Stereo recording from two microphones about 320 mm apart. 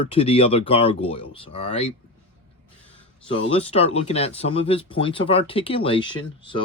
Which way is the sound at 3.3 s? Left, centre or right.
Centre.